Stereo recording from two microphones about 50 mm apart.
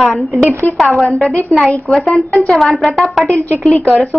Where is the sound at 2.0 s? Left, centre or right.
Centre.